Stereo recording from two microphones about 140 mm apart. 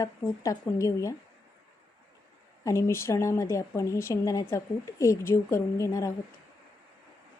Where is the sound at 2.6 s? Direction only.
20° left (ahead or behind).